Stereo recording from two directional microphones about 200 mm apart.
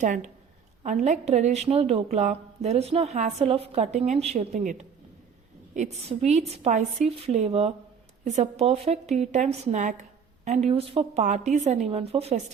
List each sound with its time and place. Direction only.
0.0 s a woman's voice: 40° right (ahead or behind)